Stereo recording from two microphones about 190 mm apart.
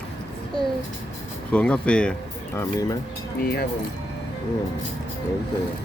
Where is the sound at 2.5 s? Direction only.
20° left (ahead or behind).